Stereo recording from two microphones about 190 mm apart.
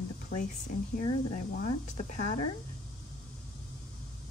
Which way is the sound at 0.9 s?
35° left (ahead or behind).